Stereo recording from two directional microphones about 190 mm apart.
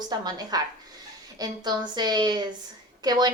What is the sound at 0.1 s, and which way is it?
A woman's voice, 20° right (ahead or behind).